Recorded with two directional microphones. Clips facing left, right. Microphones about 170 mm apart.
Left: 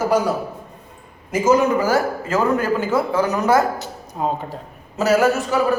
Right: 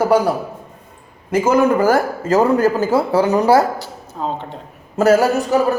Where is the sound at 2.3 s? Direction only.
40° right (ahead or behind).